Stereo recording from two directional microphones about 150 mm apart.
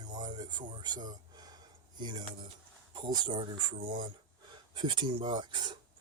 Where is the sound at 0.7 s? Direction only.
30° right (ahead or behind).